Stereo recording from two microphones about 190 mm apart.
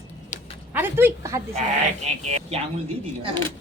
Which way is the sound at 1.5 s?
35° right (ahead or behind).